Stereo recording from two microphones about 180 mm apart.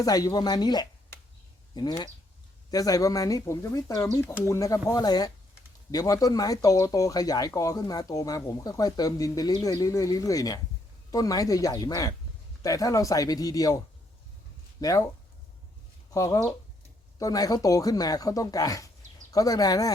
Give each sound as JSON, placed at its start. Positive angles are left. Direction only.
{"t": 0.0, "sound": "speech", "side_deg": 20}
{"t": 16.1, "sound": "speech", "side_deg": 15}